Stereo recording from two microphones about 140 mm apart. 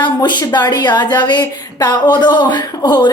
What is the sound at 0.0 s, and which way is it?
A woman's voice, 30° left (ahead or behind).